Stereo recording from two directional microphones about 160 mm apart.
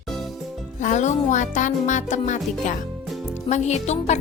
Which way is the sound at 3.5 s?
45° left (ahead or behind).